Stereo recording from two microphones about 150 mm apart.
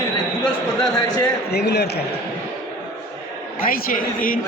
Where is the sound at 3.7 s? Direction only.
70° left (ahead or behind).